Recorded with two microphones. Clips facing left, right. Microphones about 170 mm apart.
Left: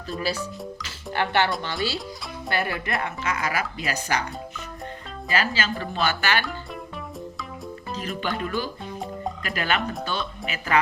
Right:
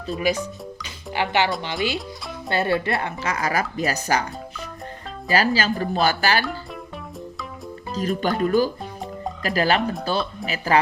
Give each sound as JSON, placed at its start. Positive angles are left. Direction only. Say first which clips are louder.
{"t": 0.2, "sound": "speech", "louder": "right 5 dB", "side_deg": -15}
{"t": 2.5, "sound": "speech", "louder": "right 5 dB", "side_deg": -30}
{"t": 5.3, "sound": "speech", "louder": "right 5 dB", "side_deg": -40}
{"t": 7.9, "sound": "speech", "louder": "right 7 dB", "side_deg": -40}